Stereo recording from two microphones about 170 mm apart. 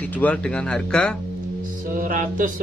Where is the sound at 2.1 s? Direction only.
55° right (ahead or behind).